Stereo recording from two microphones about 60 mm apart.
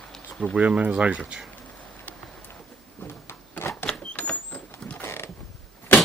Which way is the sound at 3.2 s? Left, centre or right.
Left.